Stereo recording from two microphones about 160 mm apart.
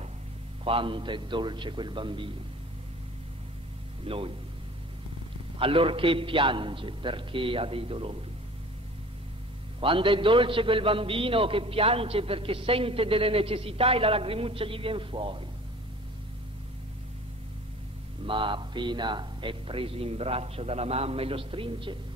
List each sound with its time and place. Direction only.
0.7 s a man's voice: 35° right (ahead or behind)
4.0 s speech: 35° right (ahead or behind)
5.6 s a man's voice: 35° right (ahead or behind)
9.8 s a man's voice: 35° right (ahead or behind)
18.2 s a man's voice: 30° right (ahead or behind)